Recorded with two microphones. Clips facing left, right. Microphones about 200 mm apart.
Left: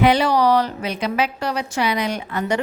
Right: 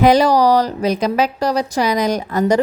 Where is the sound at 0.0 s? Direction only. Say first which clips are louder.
Right 4 dB; 40° right (ahead or behind).